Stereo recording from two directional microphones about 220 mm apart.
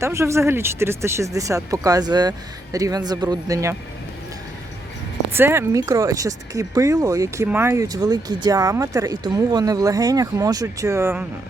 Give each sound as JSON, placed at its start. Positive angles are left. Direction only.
{"t": 0.0, "sound": "speech", "side_deg": -10}
{"t": 5.3, "sound": "speech", "side_deg": -10}